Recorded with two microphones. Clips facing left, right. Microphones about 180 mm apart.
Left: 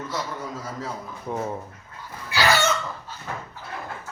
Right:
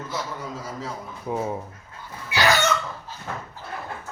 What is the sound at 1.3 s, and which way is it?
Speech, 10° right (ahead or behind).